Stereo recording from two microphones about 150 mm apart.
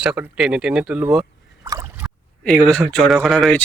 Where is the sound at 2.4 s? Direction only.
5° left (ahead or behind).